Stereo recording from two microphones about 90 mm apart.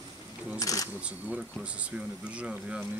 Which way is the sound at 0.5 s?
40° left (ahead or behind).